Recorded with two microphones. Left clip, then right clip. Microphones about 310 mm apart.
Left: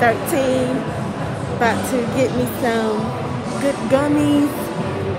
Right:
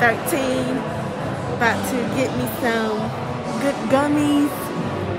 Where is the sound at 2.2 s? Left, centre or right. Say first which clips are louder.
Left 3 dB; centre.